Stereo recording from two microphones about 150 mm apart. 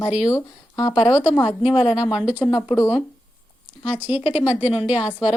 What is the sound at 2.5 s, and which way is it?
Speech, 25° left (ahead or behind).